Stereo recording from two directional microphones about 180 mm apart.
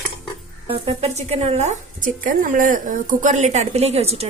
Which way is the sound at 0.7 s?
35° right (ahead or behind).